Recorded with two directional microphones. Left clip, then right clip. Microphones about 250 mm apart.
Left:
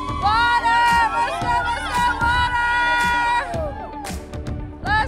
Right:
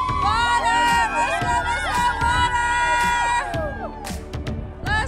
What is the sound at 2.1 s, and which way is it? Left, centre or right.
Music, centre.